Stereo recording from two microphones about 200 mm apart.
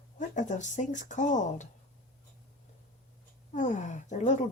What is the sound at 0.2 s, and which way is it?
Speech, 40° left (ahead or behind).